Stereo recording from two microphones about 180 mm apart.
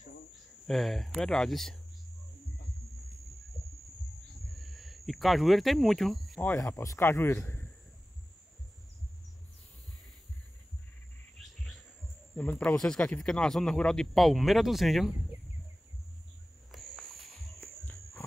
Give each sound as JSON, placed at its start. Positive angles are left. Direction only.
{"t": 0.7, "sound": "speech", "side_deg": 0}
{"t": 4.5, "sound": "cricket", "side_deg": 0}
{"t": 6.5, "sound": "speech", "side_deg": 15}
{"t": 12.4, "sound": "speech", "side_deg": 10}
{"t": 16.7, "sound": "a sound", "side_deg": 0}
{"t": 17.6, "sound": "walk", "side_deg": 15}